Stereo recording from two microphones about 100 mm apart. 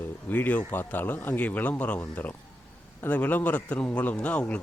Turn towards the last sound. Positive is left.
turn(degrees=15)  # may be behind; listen again after turning